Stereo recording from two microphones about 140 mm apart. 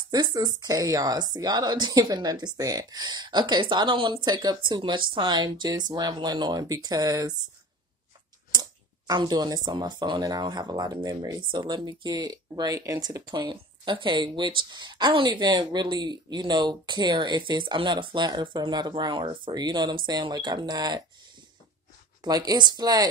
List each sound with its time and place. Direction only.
0.1 s speech: 30° right (ahead or behind)
8.5 s speech: 30° right (ahead or behind)
22.2 s speech: 30° right (ahead or behind)